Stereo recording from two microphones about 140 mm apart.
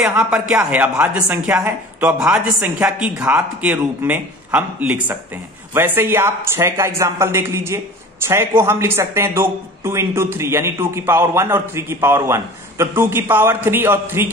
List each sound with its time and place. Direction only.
0.0 s a man's voice: 5° right (ahead or behind)